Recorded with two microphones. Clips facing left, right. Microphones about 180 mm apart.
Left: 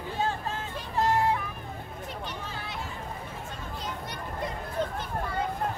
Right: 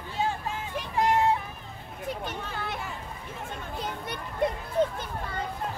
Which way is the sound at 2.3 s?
55° right (ahead or behind).